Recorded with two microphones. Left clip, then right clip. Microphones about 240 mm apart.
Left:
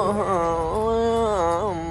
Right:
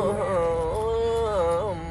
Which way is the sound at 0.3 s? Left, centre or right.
Left.